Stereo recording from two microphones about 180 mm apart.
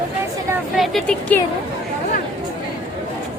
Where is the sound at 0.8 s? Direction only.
5° left (ahead or behind).